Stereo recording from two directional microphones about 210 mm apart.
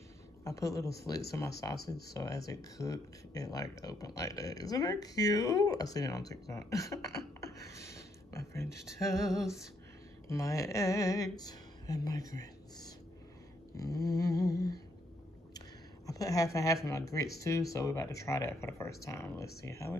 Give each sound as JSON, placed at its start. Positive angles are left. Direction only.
{"t": 0.4, "sound": "speech", "side_deg": 15}
{"t": 10.2, "sound": "a sound", "side_deg": 15}
{"t": 13.7, "sound": "speech", "side_deg": 15}
{"t": 16.1, "sound": "speech", "side_deg": 15}